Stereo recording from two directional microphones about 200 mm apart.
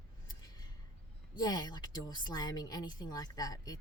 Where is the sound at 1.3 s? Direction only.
20° left (ahead or behind).